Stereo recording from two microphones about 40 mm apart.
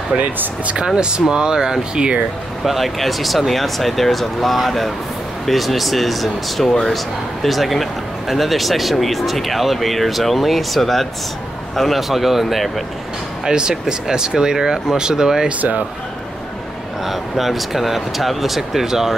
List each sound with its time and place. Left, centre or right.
0.2 s speech: right
1.3 s speech: centre
2.6 s speech: centre
13.5 s speech: centre
17.0 s speech: centre